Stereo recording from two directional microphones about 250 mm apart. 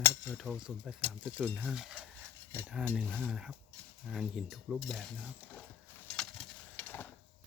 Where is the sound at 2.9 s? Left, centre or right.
Centre.